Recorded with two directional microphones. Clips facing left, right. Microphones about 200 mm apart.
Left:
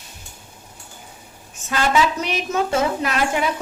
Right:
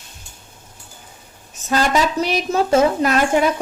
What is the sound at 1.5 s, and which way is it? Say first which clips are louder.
A woman's voice: right 2 dB; 40° right (ahead or behind).